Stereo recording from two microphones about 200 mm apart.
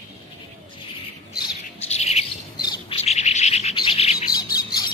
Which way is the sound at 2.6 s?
20° left (ahead or behind).